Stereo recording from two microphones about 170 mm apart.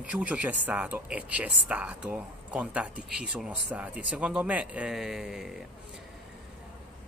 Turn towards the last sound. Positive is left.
turn(degrees=0)  # may be behind; listen again after turning